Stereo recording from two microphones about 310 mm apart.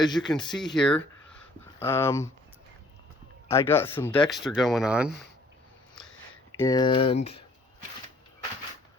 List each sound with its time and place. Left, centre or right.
0.2 s speech: centre
0.4 s speech: centre
3.5 s speech: centre
6.5 s speech: centre